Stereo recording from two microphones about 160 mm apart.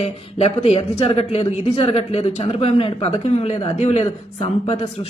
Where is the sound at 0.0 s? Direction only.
40° left (ahead or behind).